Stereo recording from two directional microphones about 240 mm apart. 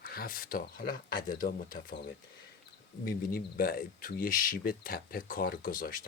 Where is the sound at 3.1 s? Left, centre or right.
Left.